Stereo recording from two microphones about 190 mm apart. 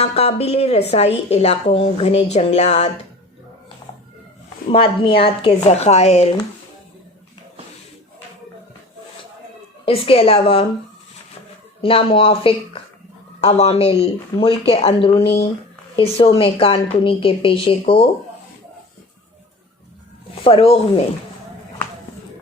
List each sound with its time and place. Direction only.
0.0 s a woman's voice: 35° left (ahead or behind)
4.7 s a woman's voice: 30° left (ahead or behind)
9.8 s a woman's voice: 30° left (ahead or behind)
11.8 s a woman's voice: 30° left (ahead or behind)
20.4 s a woman's voice: 30° left (ahead or behind)